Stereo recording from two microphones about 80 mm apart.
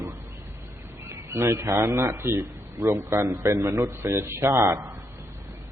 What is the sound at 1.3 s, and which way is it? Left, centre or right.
A man's voice, right.